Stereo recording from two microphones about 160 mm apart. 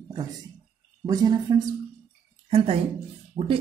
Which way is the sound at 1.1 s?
25° right (ahead or behind).